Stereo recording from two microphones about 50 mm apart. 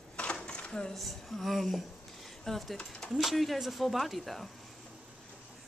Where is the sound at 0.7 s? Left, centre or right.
Centre.